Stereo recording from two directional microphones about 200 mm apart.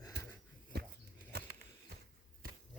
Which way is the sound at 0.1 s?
55° right (ahead or behind).